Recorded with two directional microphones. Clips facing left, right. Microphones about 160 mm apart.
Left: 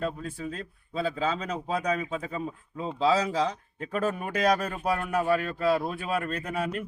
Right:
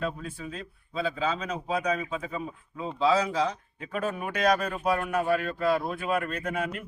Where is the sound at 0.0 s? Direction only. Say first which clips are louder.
Left 1 dB; 40° left (ahead or behind).